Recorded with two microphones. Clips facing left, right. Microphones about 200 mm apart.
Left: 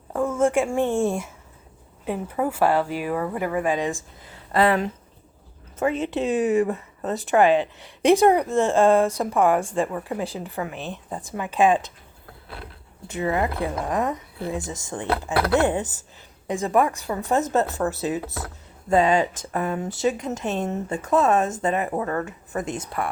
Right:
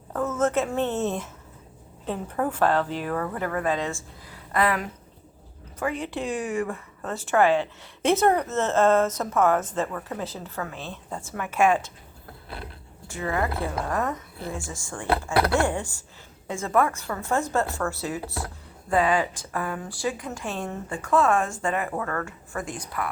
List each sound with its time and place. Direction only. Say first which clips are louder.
0.1 s a woman's voice: left 3 dB; 10° left (ahead or behind)
4.5 s speech: left 5 dB; 25° left (ahead or behind)
13.1 s speech: left 3 dB; 20° left (ahead or behind)